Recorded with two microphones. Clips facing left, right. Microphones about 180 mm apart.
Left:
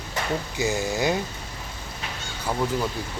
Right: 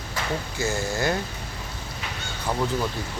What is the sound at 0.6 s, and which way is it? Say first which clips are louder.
Speech: left 1 dB; 15° left (ahead or behind).